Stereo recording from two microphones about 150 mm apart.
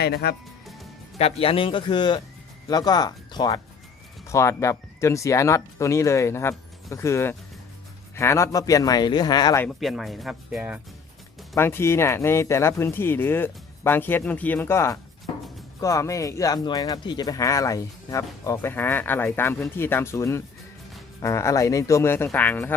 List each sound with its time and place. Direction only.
0.0 s speech: 90° left
1.2 s speech: 40° left (ahead or behind)
9.6 s speech: centre (ahead or behind)
11.5 s speech: 15° left (ahead or behind)